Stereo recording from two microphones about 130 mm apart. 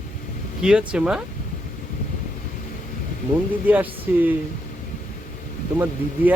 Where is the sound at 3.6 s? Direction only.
15° right (ahead or behind).